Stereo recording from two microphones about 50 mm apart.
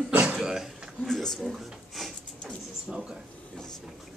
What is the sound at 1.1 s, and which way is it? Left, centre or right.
Speech, centre.